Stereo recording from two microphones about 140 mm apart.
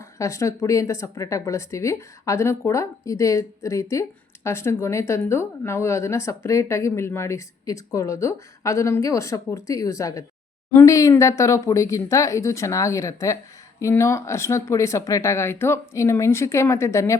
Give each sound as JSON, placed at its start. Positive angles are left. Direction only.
{"t": 0.2, "sound": "speech", "side_deg": 20}